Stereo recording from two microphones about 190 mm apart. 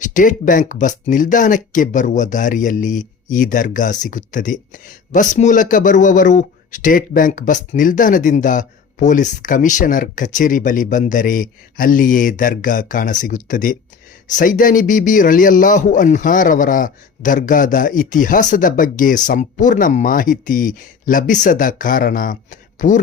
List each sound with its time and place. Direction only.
0.0 s speech: 40° left (ahead or behind)